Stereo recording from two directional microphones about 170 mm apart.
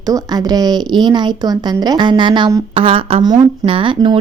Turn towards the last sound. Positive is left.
turn(degrees=-30)  # may be behind; listen again after turning